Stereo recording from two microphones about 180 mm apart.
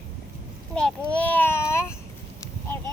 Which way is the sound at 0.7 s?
5° left (ahead or behind).